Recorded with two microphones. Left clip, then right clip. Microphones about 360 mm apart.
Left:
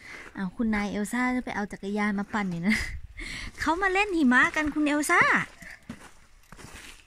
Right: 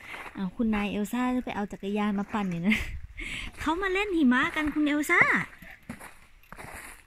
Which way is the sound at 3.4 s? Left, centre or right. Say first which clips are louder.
Left 4 dB; centre.